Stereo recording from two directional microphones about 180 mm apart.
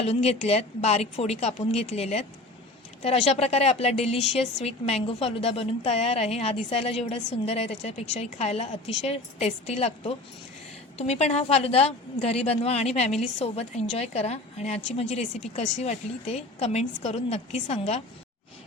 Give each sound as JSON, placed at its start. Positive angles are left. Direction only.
{"t": 0.0, "sound": "speech", "side_deg": 35}